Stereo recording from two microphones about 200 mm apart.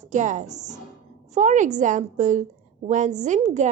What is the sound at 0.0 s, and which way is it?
A woman's voice, 35° right (ahead or behind).